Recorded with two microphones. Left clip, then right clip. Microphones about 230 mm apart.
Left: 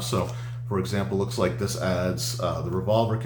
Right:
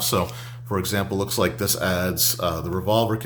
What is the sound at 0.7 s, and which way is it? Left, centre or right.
Speech, right.